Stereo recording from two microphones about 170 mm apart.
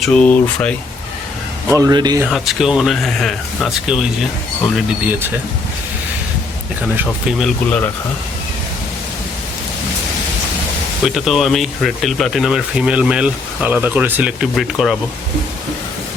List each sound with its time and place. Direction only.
0.0 s speech: 5° left (ahead or behind)
1.7 s speech: 20° right (ahead or behind)
2.2 s speech: centre (ahead or behind)
6.9 s speech: 5° right (ahead or behind)
11.0 s speech: centre (ahead or behind)